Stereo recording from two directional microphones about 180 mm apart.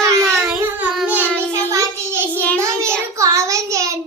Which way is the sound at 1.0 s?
10° right (ahead or behind).